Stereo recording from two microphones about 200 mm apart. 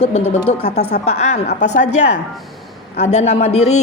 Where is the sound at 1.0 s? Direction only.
30° left (ahead or behind).